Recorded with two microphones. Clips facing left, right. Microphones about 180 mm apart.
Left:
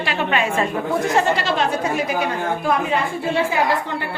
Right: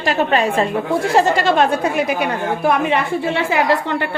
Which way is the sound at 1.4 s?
50° right (ahead or behind).